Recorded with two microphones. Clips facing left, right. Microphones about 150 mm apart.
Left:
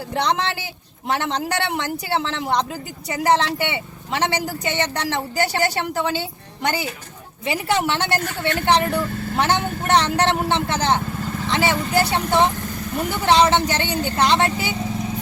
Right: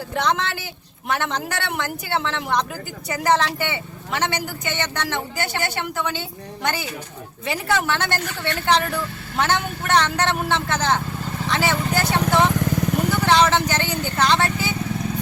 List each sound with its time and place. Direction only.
0.1 s speech: 30° left (ahead or behind)
12.5 s vehicle: 90° right
13.2 s speech: 25° left (ahead or behind)